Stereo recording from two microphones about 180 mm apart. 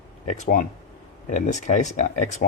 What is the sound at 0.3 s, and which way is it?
Speech, 45° left (ahead or behind).